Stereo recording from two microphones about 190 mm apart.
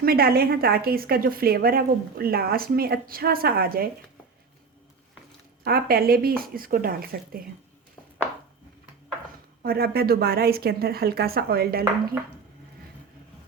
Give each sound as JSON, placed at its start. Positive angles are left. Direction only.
{"t": 0.0, "sound": "a woman's voice", "side_deg": -50}
{"t": 5.6, "sound": "a woman's voice", "side_deg": -50}
{"t": 9.6, "sound": "a woman's voice", "side_deg": -55}